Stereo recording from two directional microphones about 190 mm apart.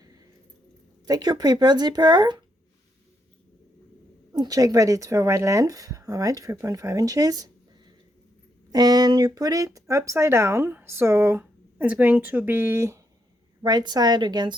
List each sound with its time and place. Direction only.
1.0 s speech: 20° right (ahead or behind)
4.3 s speech: 20° right (ahead or behind)
8.7 s speech: 20° right (ahead or behind)